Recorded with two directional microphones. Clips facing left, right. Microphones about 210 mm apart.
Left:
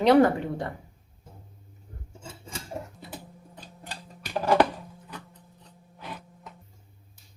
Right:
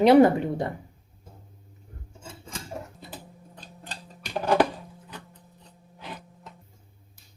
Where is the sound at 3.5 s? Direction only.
15° left (ahead or behind).